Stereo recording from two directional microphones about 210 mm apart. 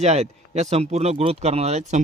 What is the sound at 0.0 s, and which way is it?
Speech, 30° right (ahead or behind).